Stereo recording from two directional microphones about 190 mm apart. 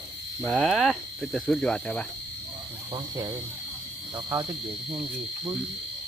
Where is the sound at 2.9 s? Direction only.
20° right (ahead or behind).